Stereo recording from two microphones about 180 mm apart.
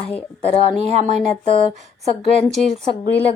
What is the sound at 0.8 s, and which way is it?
Speech, 40° right (ahead or behind).